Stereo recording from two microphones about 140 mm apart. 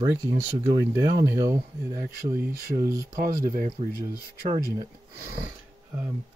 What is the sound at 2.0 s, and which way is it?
Speech, 90° right.